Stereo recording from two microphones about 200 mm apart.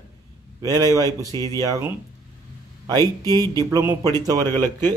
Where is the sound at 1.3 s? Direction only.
15° left (ahead or behind).